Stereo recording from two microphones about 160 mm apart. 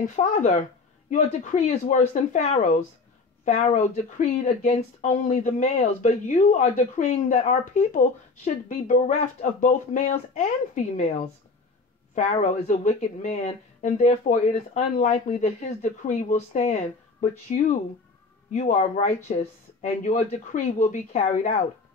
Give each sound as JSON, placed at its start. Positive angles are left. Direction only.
{"t": 0.0, "sound": "speech", "side_deg": 50}